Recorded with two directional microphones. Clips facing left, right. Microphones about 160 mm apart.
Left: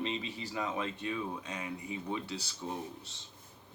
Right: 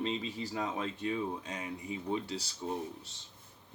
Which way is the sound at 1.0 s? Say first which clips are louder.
Right 2 dB; 45° right (ahead or behind).